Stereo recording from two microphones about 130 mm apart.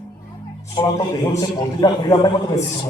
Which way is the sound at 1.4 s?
30° left (ahead or behind).